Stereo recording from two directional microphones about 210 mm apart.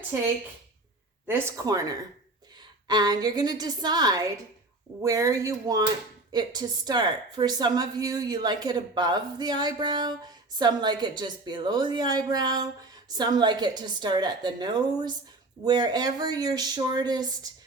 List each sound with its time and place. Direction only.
1.3 s a woman's voice: 15° right (ahead or behind)